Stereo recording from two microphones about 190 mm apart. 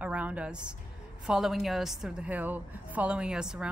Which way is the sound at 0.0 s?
5° right (ahead or behind).